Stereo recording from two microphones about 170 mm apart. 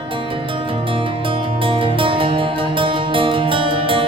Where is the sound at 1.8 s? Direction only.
30° right (ahead or behind).